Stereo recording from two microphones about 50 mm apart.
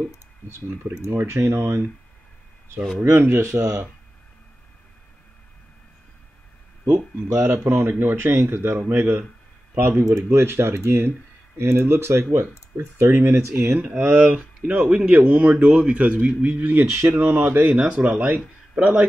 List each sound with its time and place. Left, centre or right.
0.5 s speech: right
3.0 s speech: right
6.9 s speech: right
7.7 s speech: right
9.8 s speech: right
13.7 s speech: right
14.3 s speech: right
15.2 s speech: right
15.7 s speech: right
16.4 s speech: right
16.9 s speech: right
17.2 s speech: right
17.7 s a man's voice: centre